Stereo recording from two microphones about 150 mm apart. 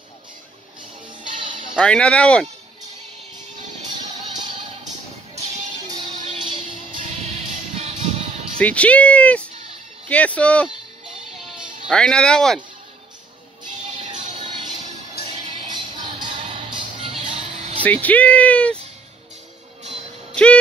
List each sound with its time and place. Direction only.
1.8 s speech: 5° left (ahead or behind)
4.6 s music: 50° right (ahead or behind)
5.9 s music: 30° right (ahead or behind)
7.0 s music: 45° right (ahead or behind)
8.5 s speech: 10° left (ahead or behind)
11.9 s speech: 5° left (ahead or behind)
15.7 s music: 30° right (ahead or behind)
17.8 s speech: 10° left (ahead or behind)